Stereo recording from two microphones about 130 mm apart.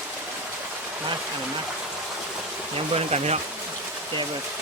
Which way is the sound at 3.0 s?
55° right (ahead or behind).